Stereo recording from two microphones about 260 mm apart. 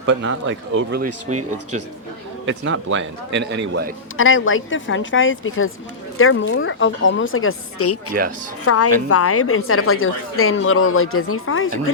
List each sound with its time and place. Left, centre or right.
0.0 s a man's voice: right
2.5 s a man's voice: right
4.2 s a woman's voice: left